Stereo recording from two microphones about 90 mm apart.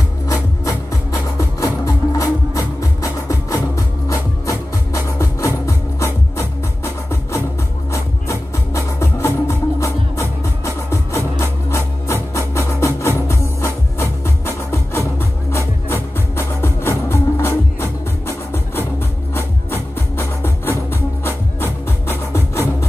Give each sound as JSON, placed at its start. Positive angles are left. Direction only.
{"t": 1.6, "sound": "music", "side_deg": 40}